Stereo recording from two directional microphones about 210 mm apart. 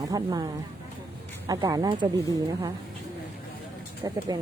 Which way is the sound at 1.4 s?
20° right (ahead or behind).